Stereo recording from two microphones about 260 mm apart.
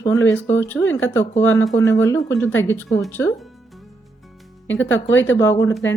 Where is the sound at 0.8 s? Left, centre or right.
Left.